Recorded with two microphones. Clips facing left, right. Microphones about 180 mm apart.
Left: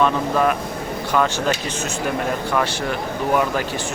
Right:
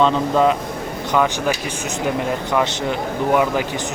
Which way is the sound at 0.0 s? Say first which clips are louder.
Right 2 dB; 20° right (ahead or behind).